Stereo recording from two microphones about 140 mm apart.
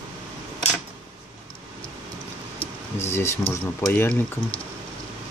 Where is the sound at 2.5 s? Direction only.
20° left (ahead or behind).